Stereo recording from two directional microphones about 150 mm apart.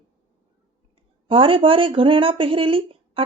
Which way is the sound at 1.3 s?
35° right (ahead or behind).